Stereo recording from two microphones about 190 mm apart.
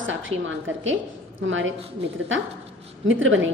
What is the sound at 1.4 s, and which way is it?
Speech, 90° right.